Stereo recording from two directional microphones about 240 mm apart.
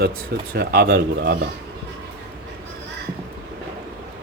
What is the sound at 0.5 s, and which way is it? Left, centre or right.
Speech, right.